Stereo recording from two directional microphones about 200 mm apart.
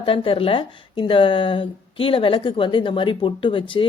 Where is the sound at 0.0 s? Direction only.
25° left (ahead or behind).